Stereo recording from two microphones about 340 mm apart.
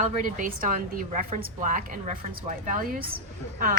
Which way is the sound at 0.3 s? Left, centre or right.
Right.